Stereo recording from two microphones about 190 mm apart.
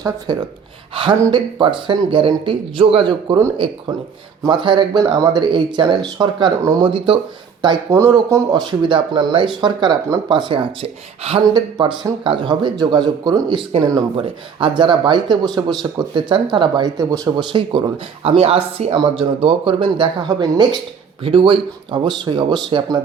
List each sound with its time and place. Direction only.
0.0 s speech: 20° right (ahead or behind)